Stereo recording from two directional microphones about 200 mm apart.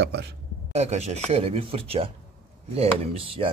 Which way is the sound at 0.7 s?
35° right (ahead or behind).